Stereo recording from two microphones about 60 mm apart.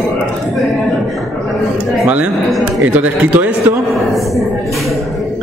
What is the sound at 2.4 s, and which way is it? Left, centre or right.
Speech, centre.